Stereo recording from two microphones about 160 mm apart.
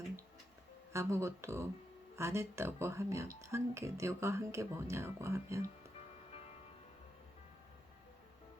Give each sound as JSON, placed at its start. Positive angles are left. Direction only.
{"t": 0.9, "sound": "speech", "side_deg": -15}